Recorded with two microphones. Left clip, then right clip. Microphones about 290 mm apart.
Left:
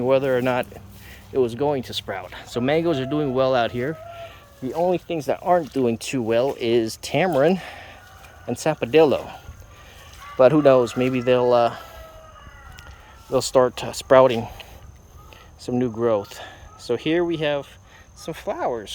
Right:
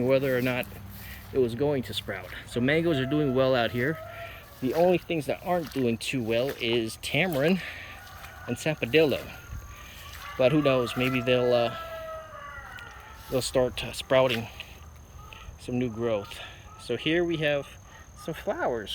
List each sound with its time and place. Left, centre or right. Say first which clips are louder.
0.0 s speech: left 5 dB; centre
13.3 s speech: left 8 dB; centre
15.8 s speech: left 8 dB; centre